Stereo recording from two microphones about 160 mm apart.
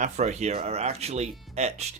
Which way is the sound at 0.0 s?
45° right (ahead or behind).